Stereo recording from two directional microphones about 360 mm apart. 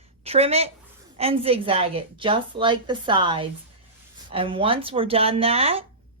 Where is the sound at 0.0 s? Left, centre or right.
Centre.